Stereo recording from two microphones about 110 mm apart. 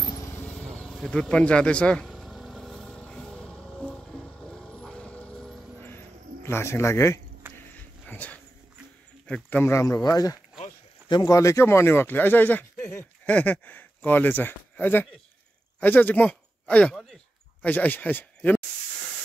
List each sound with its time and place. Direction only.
0.5 s speech: 5° left (ahead or behind)
2.0 s vehicle: centre (ahead or behind)
5.8 s a sound: 20° left (ahead or behind)
9.3 s speech: 15° left (ahead or behind)
9.8 s speech: 30° left (ahead or behind)
11.3 s speech: 25° left (ahead or behind)
16.9 s a sound: centre (ahead or behind)
17.6 s speech: 15° left (ahead or behind)